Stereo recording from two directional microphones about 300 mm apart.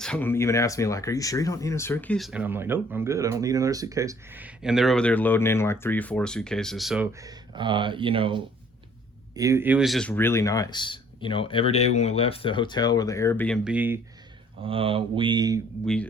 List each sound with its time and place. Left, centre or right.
0.0 s speech: centre
14.6 s speech: centre